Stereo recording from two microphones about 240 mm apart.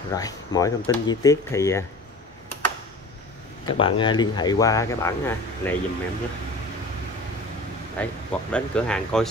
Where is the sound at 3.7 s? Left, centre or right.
Left.